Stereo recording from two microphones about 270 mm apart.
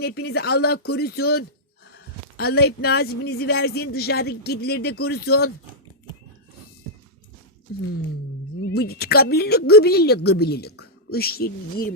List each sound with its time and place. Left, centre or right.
0.0 s a woman's voice: left
8.7 s a woman's voice: left